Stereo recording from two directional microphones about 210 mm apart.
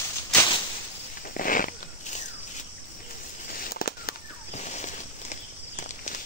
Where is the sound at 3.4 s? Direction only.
45° left (ahead or behind).